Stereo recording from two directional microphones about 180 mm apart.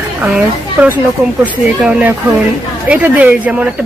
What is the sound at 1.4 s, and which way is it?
Speech, 10° right (ahead or behind).